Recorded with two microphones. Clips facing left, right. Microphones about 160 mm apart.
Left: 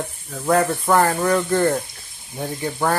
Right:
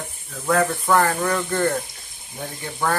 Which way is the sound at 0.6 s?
15° left (ahead or behind).